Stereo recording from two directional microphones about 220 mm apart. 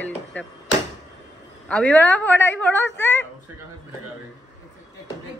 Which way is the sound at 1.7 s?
5° left (ahead or behind).